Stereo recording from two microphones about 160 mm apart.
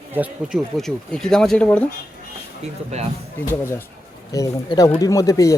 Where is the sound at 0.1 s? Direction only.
10° right (ahead or behind).